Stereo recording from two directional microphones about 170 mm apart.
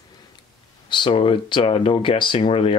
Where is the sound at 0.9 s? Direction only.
30° left (ahead or behind).